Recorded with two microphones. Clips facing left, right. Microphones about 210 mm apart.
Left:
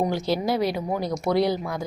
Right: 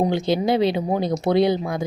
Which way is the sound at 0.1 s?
20° right (ahead or behind).